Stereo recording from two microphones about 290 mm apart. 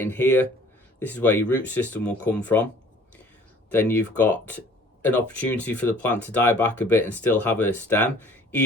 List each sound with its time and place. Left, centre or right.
0.0 s speech: centre
3.7 s speech: centre